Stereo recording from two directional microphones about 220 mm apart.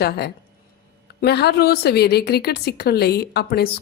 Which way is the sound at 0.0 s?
45° left (ahead or behind).